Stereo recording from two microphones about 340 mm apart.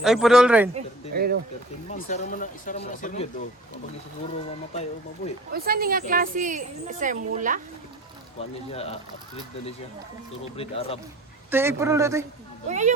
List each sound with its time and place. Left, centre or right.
0.0 s a man's voice: centre
1.1 s speech: right
1.9 s speech: left
4.7 s speech: centre
5.5 s a woman's voice: right
8.4 s speech: centre
10.6 s speech: centre
11.5 s speech: centre
12.6 s a woman's voice: right